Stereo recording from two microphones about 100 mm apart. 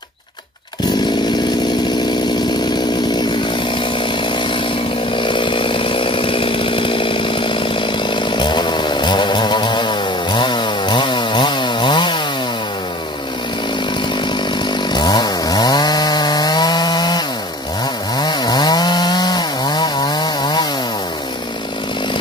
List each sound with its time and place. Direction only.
5.1 s chainsaw: 55° left (ahead or behind)
14.9 s chainsaw: 45° left (ahead or behind)
18.2 s chainsaw: 45° left (ahead or behind)